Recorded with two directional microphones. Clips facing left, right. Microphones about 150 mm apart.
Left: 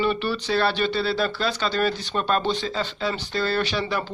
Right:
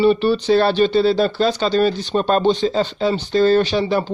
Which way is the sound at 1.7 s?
25° right (ahead or behind).